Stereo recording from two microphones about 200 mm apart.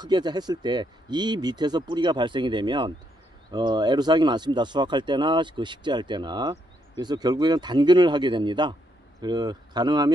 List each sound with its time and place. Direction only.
0.0 s speech: 20° right (ahead or behind)